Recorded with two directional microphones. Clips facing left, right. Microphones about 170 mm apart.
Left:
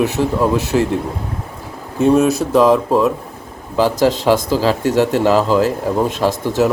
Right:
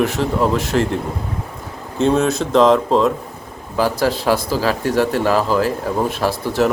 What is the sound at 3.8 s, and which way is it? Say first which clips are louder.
Speech: left 3 dB; 10° right (ahead or behind).